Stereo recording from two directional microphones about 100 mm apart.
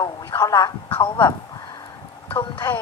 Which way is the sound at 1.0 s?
55° left (ahead or behind).